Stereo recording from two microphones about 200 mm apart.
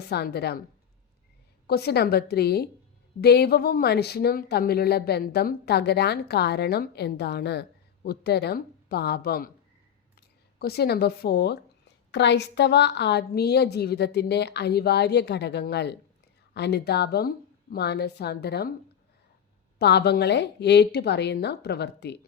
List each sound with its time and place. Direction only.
0.1 s a woman's voice: 55° left (ahead or behind)
1.6 s a woman's voice: 55° left (ahead or behind)
19.8 s a woman's voice: 55° left (ahead or behind)